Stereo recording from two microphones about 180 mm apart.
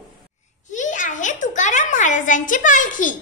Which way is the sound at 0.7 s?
45° left (ahead or behind).